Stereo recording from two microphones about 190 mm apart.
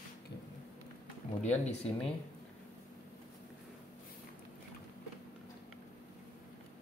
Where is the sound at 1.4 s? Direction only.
35° left (ahead or behind).